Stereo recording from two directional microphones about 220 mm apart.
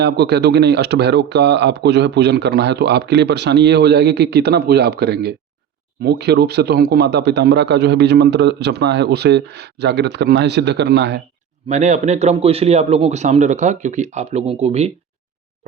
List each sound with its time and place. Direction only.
0.0 s speech: 50° right (ahead or behind)
11.7 s a man's voice: 35° right (ahead or behind)